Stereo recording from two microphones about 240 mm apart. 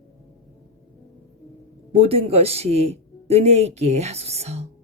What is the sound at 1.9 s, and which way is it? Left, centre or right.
Speech, right.